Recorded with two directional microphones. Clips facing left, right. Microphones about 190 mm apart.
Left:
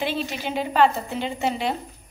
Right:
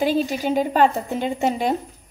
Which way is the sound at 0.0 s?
40° right (ahead or behind).